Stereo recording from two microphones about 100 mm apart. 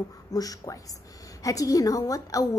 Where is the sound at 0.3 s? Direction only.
35° left (ahead or behind).